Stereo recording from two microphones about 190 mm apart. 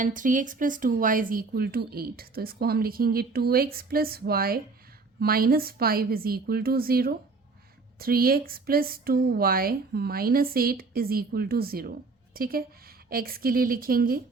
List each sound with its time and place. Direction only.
0.0 s speech: 45° right (ahead or behind)